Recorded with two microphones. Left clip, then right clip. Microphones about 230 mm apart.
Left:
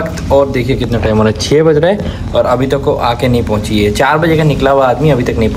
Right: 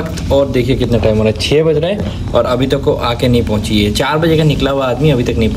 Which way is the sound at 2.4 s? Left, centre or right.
Centre.